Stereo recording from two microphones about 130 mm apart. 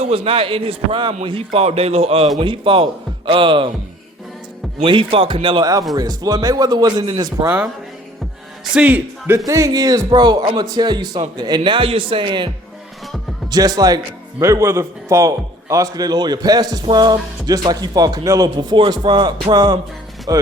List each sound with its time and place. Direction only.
0.0 s a man's voice: 50° right (ahead or behind)
2.4 s speech: 40° right (ahead or behind)
4.9 s speech: 40° right (ahead or behind)
8.7 s a man's voice: 10° right (ahead or behind)
9.5 s speech: 25° right (ahead or behind)
13.5 s speech: 30° right (ahead or behind)